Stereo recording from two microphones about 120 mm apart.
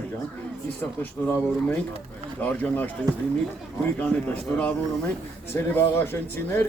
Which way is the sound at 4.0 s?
15° left (ahead or behind).